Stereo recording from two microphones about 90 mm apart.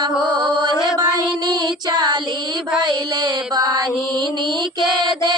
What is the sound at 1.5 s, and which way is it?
Music, 50° right (ahead or behind).